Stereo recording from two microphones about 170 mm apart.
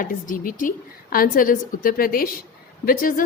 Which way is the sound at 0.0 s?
55° left (ahead or behind).